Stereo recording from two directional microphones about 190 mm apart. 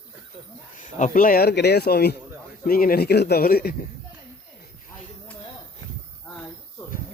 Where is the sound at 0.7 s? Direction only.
40° left (ahead or behind).